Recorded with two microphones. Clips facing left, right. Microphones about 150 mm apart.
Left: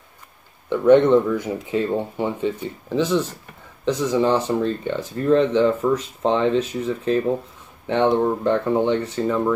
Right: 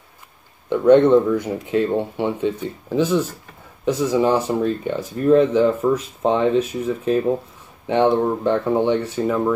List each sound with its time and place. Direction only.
1.0 s speech: 15° right (ahead or behind)